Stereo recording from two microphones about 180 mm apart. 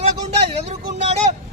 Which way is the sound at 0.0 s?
35° right (ahead or behind).